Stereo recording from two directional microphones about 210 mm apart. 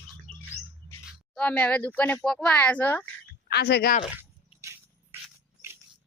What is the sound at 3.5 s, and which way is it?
Speech, 50° left (ahead or behind).